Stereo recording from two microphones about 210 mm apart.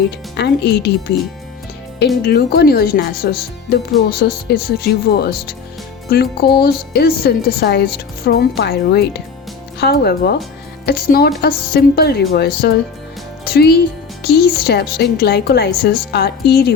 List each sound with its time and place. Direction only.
0.3 s speech: 50° left (ahead or behind)
2.2 s speech: 50° left (ahead or behind)
13.4 s music: 50° left (ahead or behind)
14.3 s speech: 50° left (ahead or behind)